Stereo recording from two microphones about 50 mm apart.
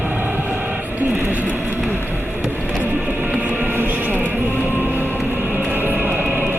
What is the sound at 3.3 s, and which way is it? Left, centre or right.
Music, right.